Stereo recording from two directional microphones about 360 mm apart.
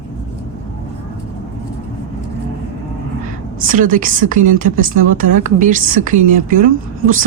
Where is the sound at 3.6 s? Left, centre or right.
Right.